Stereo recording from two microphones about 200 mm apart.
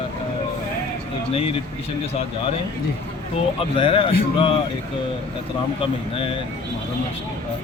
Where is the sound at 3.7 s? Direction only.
25° left (ahead or behind).